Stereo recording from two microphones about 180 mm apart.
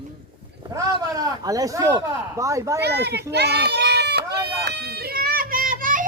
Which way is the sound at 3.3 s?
65° right (ahead or behind).